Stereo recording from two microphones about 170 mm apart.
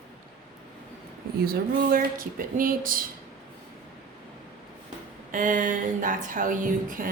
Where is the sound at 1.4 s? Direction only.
60° right (ahead or behind).